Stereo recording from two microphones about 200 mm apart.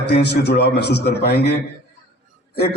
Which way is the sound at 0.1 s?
55° left (ahead or behind).